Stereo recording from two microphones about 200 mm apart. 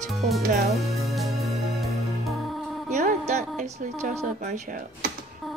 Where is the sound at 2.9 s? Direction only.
35° right (ahead or behind).